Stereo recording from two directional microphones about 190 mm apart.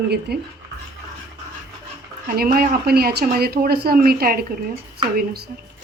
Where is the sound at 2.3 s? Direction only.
50° right (ahead or behind).